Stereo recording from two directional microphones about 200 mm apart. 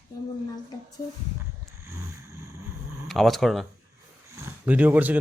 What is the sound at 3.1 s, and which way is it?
A man's voice, centre (ahead or behind).